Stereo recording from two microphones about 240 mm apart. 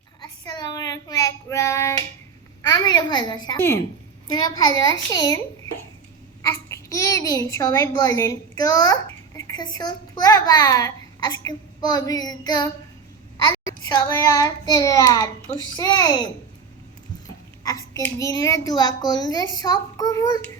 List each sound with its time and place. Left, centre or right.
0.2 s child singing: centre
2.6 s a sound: centre
4.3 s a child's voice: centre
6.4 s babbling: centre
9.7 s a child's voice: centre
17.6 s a child's voice: centre